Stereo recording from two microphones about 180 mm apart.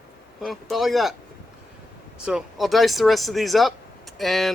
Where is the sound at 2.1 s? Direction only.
5° right (ahead or behind).